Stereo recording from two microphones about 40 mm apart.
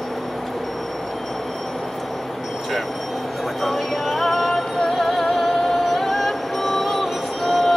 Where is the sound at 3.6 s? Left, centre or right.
Centre.